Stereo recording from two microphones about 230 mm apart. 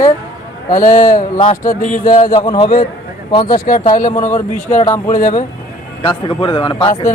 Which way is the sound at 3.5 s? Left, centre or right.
Left.